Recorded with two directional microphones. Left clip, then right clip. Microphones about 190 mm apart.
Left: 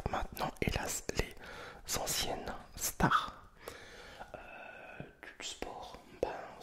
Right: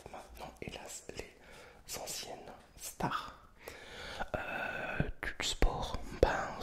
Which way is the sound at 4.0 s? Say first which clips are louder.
Right 9 dB; 30° right (ahead or behind).